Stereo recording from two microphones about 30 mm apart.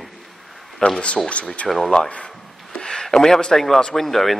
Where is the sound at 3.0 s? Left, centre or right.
Centre.